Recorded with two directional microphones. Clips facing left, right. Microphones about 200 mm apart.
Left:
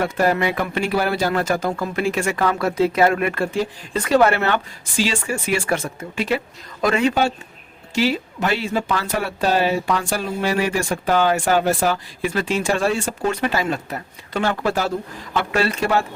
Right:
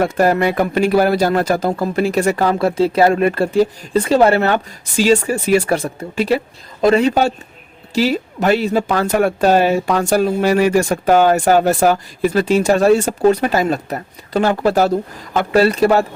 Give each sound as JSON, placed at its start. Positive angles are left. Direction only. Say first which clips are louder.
{"t": 0.0, "sound": "speech", "louder": "right 5 dB", "side_deg": -45}